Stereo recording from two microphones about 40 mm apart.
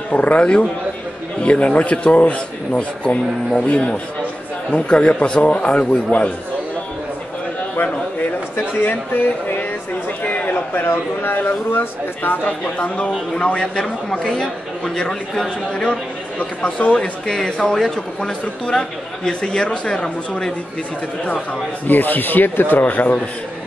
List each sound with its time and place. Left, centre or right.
0.1 s speech: left
7.7 s a sound: left
8.7 s speech: left
12.4 s speech: left; by 14.5 s centre
16.8 s speech: left
17.5 s speech: left
17.7 s speech: centre
18.7 s speech: left
21.8 s speech: left